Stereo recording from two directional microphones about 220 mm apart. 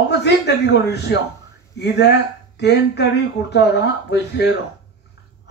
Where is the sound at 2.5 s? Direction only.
50° left (ahead or behind).